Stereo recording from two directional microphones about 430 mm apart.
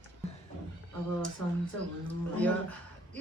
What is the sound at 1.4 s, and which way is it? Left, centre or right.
Speech, right.